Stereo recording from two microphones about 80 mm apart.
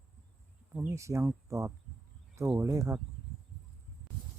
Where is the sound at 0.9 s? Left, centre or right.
Right.